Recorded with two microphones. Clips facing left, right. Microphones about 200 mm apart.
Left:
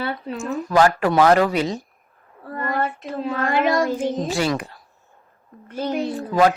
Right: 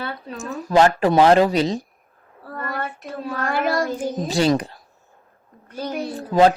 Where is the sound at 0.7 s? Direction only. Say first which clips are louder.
Right 2 dB; 25° right (ahead or behind).